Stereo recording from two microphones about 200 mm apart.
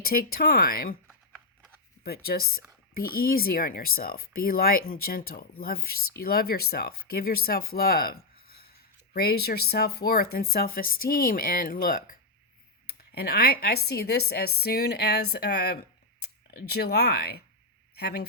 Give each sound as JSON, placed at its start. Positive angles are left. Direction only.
{"t": 0.0, "sound": "speech", "side_deg": 50}
{"t": 2.0, "sound": "speech", "side_deg": 50}